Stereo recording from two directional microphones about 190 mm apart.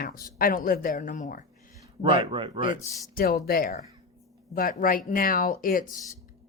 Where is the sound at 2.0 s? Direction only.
25° right (ahead or behind).